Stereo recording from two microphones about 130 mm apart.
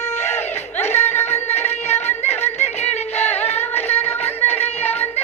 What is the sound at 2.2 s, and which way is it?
Music, 55° left (ahead or behind).